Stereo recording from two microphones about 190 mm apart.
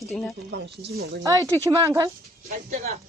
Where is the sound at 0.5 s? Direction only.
60° right (ahead or behind).